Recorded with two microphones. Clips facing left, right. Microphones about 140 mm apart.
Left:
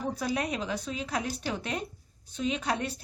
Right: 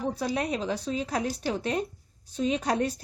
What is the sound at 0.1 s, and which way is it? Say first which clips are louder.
Speech: right 2 dB; 30° right (ahead or behind).